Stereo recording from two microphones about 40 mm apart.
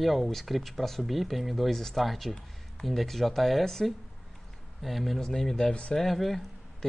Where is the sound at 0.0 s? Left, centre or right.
Centre.